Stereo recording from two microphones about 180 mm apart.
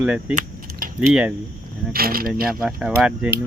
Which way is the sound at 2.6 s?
5° right (ahead or behind).